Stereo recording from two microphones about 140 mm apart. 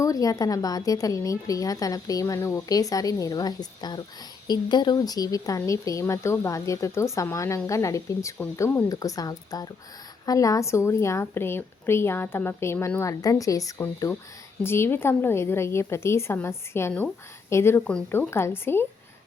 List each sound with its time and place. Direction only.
0.0 s a woman's voice: 25° left (ahead or behind)